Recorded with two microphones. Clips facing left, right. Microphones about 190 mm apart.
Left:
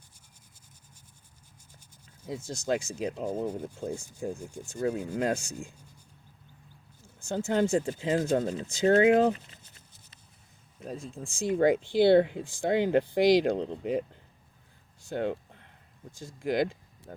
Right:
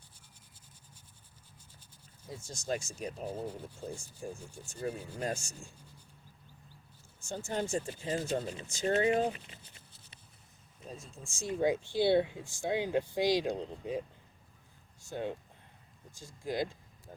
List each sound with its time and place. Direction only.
2.2 s speech: 75° left (ahead or behind)
3.2 s speech: 45° left (ahead or behind)
3.8 s speech: 80° left
5.2 s speech: 60° left (ahead or behind)
7.3 s speech: 70° left (ahead or behind)
10.8 s speech: 80° left
15.1 s a sound: 75° left (ahead or behind)
16.2 s speech: 90° left